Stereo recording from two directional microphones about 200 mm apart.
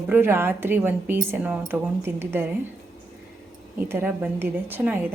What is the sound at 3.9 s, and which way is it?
A woman's voice, 10° right (ahead or behind).